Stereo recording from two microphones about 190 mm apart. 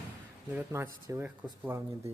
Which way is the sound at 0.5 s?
15° right (ahead or behind).